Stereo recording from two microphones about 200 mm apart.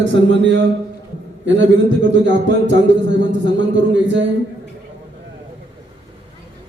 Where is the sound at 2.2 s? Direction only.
65° right (ahead or behind).